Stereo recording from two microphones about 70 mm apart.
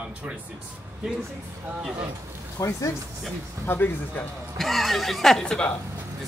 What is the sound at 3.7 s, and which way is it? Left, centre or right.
Speech, left.